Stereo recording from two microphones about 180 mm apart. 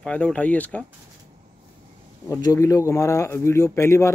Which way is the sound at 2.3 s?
20° left (ahead or behind).